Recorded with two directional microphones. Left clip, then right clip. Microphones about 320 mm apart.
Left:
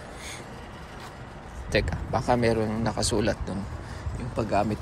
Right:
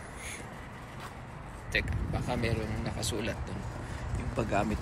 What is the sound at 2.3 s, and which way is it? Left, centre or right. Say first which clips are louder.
Speech: left 10 dB; left.